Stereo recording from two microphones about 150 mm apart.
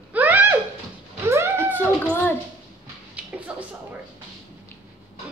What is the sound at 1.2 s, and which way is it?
Cat, 15° right (ahead or behind).